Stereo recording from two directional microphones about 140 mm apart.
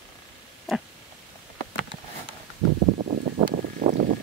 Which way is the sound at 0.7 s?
Centre (ahead or behind).